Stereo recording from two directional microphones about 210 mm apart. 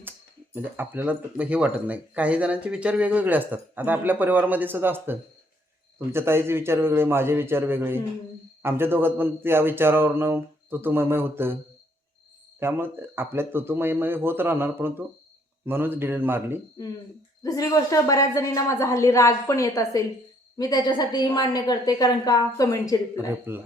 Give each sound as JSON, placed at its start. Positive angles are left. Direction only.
{"t": 0.5, "sound": "speech", "side_deg": -10}
{"t": 12.5, "sound": "speech", "side_deg": -10}
{"t": 17.4, "sound": "a woman's voice", "side_deg": 15}
{"t": 23.1, "sound": "speech", "side_deg": -10}